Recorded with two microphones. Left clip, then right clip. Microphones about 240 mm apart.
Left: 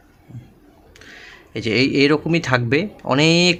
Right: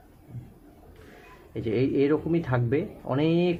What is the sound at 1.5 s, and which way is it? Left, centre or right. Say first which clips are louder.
Speech: left 8 dB; left.